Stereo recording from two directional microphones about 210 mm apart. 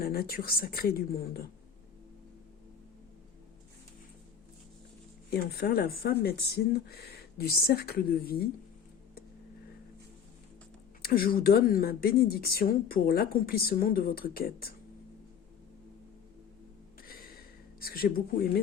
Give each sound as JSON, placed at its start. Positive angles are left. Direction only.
{"t": 0.0, "sound": "speech", "side_deg": 45}
{"t": 5.3, "sound": "speech", "side_deg": 50}
{"t": 11.0, "sound": "speech", "side_deg": 45}
{"t": 17.0, "sound": "a sound", "side_deg": 45}
{"t": 17.7, "sound": "speech", "side_deg": 45}